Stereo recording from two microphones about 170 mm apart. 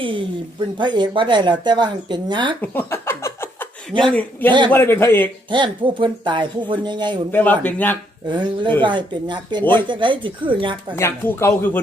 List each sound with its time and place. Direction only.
0.0 s a woman's voice: 30° right (ahead or behind)
2.6 s a sound: 10° left (ahead or behind)
4.1 s speech: 10° left (ahead or behind)
5.5 s speech: 30° right (ahead or behind)
7.3 s speech: 10° left (ahead or behind)
8.3 s speech: 30° right (ahead or behind)
10.9 s speech: 15° left (ahead or behind)